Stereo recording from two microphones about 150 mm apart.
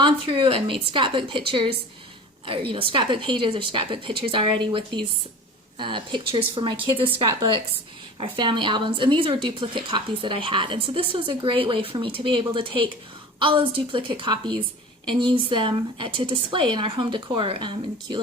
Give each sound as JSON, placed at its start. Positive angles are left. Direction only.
{"t": 0.0, "sound": "a woman's voice", "side_deg": -35}
{"t": 5.8, "sound": "a woman's voice", "side_deg": -35}